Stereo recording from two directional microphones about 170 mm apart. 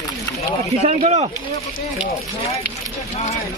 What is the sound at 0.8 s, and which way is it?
Speech, 40° right (ahead or behind).